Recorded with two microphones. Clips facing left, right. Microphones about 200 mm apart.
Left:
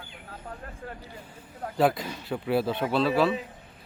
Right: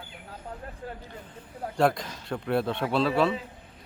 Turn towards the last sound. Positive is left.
turn(degrees=0)  # may be behind; listen again after turning